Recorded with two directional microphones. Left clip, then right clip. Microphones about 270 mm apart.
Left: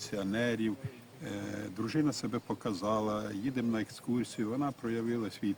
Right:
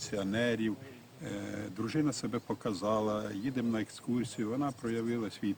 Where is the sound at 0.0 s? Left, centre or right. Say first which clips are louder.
Right 1 dB; centre.